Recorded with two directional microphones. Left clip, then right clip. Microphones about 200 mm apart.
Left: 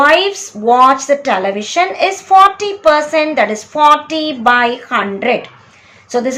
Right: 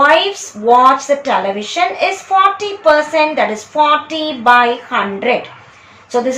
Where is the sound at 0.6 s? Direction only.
35° left (ahead or behind).